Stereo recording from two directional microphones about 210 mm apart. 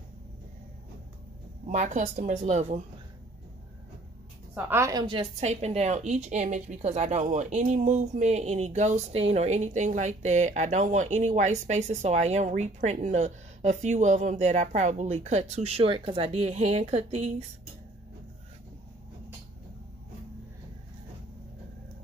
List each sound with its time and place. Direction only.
1.7 s a woman's voice: 35° right (ahead or behind)
4.6 s a woman's voice: 10° right (ahead or behind); by 17.5 s 35° right (ahead or behind)